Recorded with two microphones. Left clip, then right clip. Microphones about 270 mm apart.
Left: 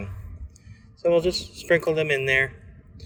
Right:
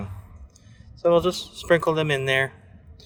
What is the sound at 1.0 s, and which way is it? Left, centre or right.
A man's voice, centre.